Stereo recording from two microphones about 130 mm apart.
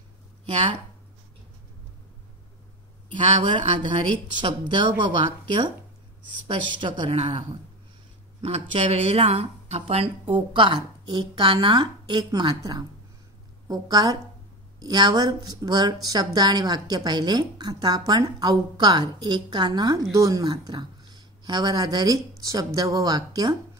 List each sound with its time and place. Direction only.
0.5 s speech: 40° right (ahead or behind)
3.1 s a woman's voice: 40° right (ahead or behind)
6.4 s a woman's voice: 40° right (ahead or behind)